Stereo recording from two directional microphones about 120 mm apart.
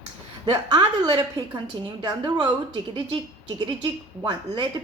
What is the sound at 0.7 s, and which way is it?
A woman's voice, 40° right (ahead or behind).